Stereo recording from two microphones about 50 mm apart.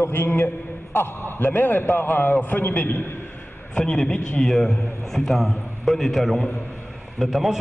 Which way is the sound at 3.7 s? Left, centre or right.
Centre.